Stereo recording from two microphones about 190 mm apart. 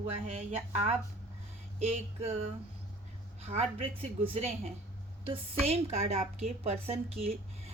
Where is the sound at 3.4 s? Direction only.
35° right (ahead or behind).